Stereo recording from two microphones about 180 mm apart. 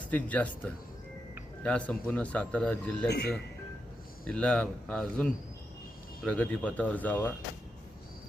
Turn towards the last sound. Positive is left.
turn(degrees=10)  # may be behind; listen again after turning